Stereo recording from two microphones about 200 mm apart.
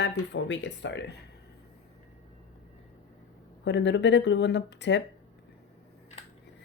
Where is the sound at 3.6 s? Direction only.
60° left (ahead or behind).